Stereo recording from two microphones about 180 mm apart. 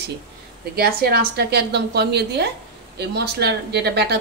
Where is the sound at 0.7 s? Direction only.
60° right (ahead or behind).